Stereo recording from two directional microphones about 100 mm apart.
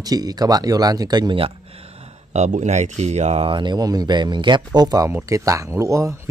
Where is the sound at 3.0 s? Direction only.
90° right.